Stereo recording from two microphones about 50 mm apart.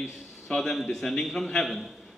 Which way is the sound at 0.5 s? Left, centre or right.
Centre.